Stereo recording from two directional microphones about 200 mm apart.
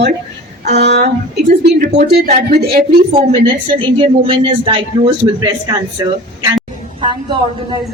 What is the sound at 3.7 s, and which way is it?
Speech, 25° right (ahead or behind).